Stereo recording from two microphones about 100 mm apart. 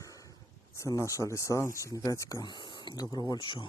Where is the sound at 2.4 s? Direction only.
50° left (ahead or behind).